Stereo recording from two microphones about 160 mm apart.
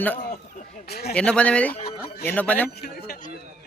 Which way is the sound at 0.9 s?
80° left.